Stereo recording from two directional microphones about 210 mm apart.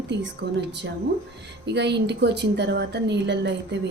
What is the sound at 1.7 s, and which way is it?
A woman's voice, 55° right (ahead or behind).